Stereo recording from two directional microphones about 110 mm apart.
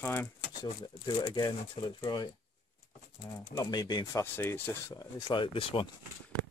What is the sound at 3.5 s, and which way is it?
Speech, 35° left (ahead or behind).